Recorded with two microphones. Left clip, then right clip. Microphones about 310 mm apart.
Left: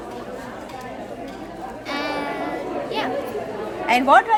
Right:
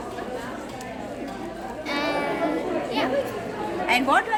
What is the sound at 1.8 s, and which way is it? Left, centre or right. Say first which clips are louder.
Music: even; centre.